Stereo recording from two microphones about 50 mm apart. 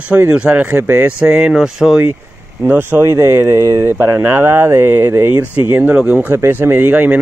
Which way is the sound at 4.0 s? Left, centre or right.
Right.